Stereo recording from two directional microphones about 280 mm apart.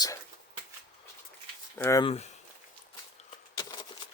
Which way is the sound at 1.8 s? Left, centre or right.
Centre.